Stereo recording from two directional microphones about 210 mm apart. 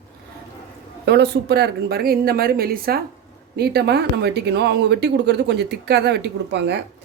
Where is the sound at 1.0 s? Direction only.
50° right (ahead or behind).